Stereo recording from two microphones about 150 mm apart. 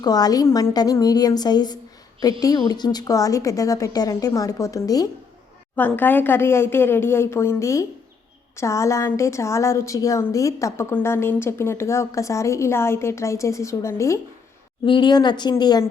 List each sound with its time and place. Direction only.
0.0 s a woman's voice: 25° left (ahead or behind)
5.7 s a woman's voice: 10° left (ahead or behind)
14.8 s a woman's voice: 30° left (ahead or behind)